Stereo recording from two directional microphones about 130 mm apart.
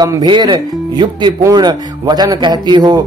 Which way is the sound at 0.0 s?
30° right (ahead or behind).